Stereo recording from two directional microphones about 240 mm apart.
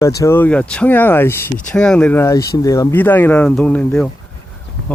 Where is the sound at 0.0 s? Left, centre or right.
Centre.